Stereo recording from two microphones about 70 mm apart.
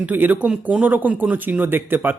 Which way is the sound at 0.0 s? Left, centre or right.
Right.